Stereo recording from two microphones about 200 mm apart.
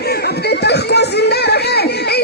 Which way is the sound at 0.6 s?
55° left (ahead or behind).